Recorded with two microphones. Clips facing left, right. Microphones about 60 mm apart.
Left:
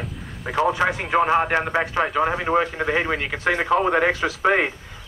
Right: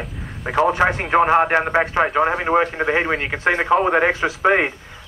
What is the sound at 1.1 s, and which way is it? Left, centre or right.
A man's voice, right.